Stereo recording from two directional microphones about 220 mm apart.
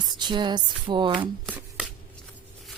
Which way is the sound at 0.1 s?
20° right (ahead or behind).